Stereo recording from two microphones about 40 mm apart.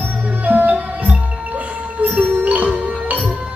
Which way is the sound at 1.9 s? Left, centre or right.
Right.